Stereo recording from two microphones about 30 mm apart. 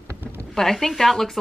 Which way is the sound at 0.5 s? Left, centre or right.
Centre.